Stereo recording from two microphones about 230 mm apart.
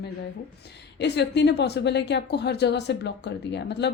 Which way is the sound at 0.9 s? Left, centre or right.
Left.